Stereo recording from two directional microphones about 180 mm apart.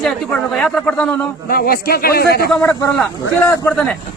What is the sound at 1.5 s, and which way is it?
Speech, 55° left (ahead or behind).